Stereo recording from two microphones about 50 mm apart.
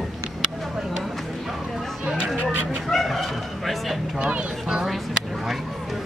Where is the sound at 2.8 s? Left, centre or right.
Centre.